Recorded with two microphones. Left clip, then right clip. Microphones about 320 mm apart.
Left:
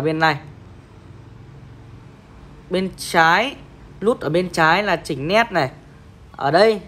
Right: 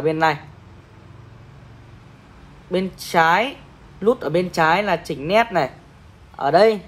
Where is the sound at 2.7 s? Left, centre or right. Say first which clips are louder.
Left 1 dB; left.